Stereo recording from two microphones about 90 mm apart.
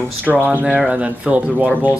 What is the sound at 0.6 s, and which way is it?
Speech, 10° right (ahead or behind).